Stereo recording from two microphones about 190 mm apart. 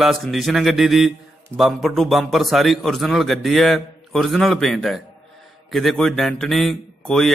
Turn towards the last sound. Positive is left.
turn(degrees=0)  # may be behind; listen again after turning